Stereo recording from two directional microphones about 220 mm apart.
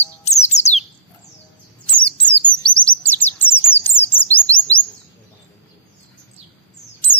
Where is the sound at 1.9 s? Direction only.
5° left (ahead or behind).